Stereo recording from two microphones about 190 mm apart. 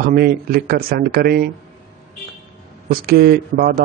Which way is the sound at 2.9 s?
55° right (ahead or behind).